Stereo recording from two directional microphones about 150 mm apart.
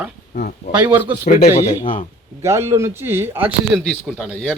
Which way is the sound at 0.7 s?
10° right (ahead or behind).